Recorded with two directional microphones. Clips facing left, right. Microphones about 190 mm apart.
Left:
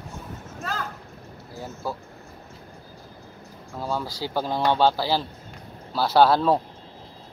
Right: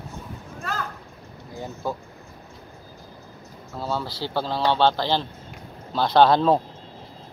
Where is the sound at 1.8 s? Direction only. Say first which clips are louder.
Right 2 dB; 15° right (ahead or behind).